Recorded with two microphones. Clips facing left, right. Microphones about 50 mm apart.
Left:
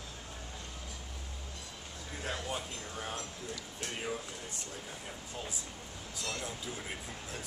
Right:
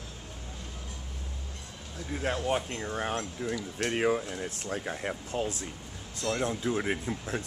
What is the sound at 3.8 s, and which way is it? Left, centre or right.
Speech, right.